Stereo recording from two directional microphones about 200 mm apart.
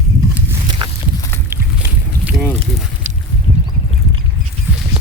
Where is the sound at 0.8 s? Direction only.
25° right (ahead or behind).